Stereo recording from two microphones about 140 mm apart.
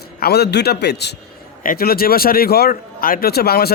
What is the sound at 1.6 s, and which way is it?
Speech, 85° left.